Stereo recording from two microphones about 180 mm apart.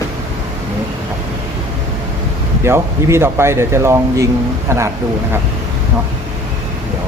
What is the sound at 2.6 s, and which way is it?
Speech, 15° right (ahead or behind).